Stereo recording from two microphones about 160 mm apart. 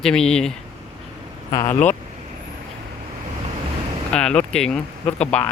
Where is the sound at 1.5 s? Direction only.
20° left (ahead or behind).